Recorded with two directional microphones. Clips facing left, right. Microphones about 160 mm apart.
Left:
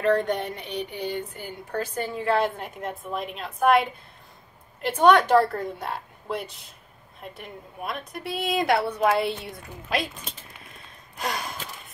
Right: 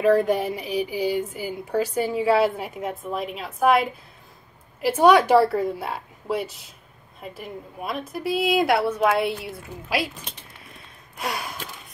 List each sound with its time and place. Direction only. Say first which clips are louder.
0.0 s speech: right 4 dB; 5° right (ahead or behind)
11.1 s speech: right 1 dB; centre (ahead or behind)